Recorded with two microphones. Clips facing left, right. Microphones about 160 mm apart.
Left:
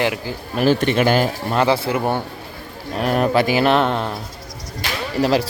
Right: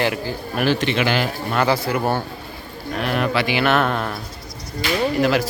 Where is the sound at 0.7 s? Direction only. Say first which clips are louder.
Left 4 dB; 45° left (ahead or behind).